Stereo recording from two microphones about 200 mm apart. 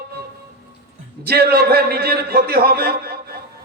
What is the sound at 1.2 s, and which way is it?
A man's voice, 50° right (ahead or behind).